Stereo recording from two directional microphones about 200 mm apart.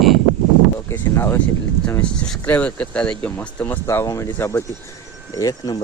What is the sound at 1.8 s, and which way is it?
Speech, 5° left (ahead or behind).